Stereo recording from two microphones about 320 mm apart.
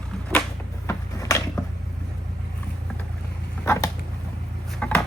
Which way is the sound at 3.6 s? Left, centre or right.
Centre.